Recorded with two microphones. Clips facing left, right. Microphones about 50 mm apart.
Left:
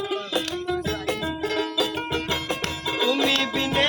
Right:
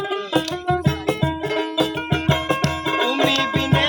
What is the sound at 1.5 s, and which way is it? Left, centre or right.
Music, right.